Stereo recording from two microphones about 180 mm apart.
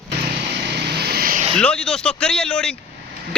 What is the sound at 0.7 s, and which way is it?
Vehicle, 65° right (ahead or behind).